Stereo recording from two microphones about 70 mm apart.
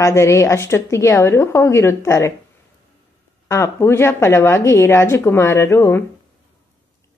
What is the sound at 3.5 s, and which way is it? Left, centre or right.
A woman's voice, left.